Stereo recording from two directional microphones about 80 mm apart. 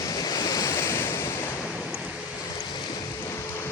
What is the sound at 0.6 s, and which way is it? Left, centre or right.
Waves, left.